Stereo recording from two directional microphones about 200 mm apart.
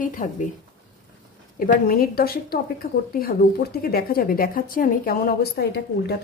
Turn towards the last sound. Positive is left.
turn(degrees=55)  # may be behind; listen again after turning